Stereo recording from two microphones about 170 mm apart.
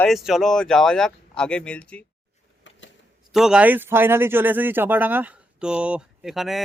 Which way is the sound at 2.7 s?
90° left.